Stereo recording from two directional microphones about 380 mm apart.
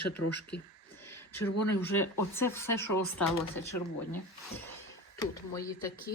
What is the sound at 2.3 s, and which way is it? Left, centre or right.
Speech, centre.